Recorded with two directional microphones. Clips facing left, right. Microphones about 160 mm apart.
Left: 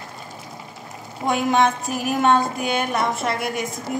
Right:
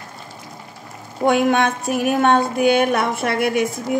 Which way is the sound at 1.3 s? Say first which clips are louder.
Right 3 dB; 65° right (ahead or behind).